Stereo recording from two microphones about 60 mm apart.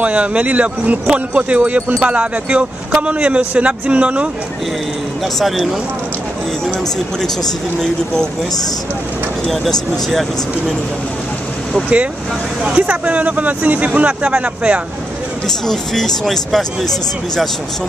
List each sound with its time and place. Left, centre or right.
0.0 s speech: right
5.4 s speech: centre
7.8 s speech: centre
9.5 s speech: centre
12.6 s speech: right
15.4 s speech: centre